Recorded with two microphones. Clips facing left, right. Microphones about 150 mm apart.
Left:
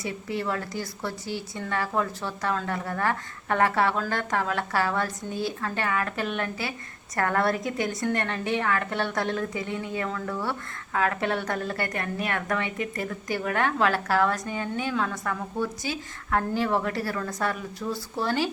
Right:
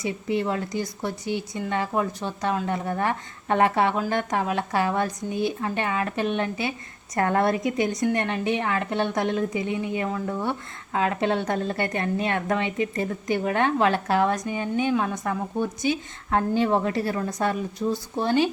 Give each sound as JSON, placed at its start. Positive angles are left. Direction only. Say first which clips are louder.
{"t": 0.0, "sound": "a woman's voice", "louder": "right 5 dB", "side_deg": -20}